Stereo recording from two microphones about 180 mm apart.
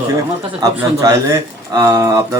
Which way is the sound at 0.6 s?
20° right (ahead or behind).